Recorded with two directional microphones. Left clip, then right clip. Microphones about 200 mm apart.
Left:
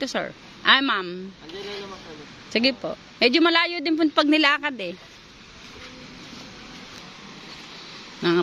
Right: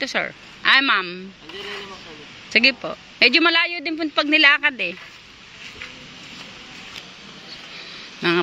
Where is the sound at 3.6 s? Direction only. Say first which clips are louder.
Even; 30° left (ahead or behind).